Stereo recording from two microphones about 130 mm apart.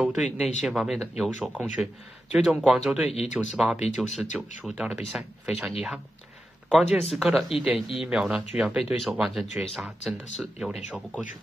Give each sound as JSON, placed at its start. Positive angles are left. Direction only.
{"t": 0.0, "sound": "speech", "side_deg": -5}
{"t": 3.1, "sound": "speech", "side_deg": 55}
{"t": 3.5, "sound": "speech", "side_deg": -5}